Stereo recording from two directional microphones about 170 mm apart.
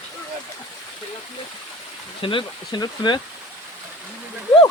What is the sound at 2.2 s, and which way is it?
Speech, 25° left (ahead or behind).